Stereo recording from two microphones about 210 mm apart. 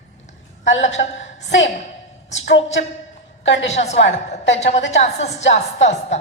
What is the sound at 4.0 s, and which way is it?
Speech, 60° left (ahead or behind).